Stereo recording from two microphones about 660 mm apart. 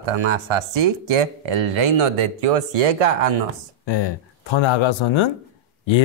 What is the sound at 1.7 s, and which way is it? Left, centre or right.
Speech, right.